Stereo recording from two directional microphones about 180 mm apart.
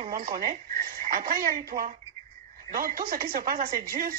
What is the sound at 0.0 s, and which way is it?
Speech, 50° right (ahead or behind).